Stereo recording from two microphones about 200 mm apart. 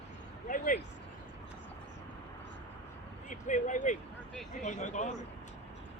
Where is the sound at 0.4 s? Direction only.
40° left (ahead or behind).